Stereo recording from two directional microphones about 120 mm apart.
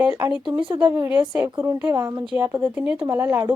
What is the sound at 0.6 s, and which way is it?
Speech, 40° right (ahead or behind).